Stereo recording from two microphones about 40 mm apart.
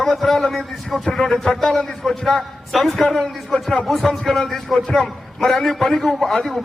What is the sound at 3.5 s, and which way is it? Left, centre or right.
Speech, left.